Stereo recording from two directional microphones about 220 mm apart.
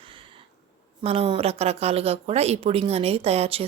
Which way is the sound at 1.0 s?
25° right (ahead or behind).